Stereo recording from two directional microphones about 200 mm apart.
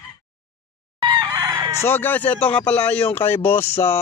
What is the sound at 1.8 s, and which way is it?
Speech, 10° left (ahead or behind).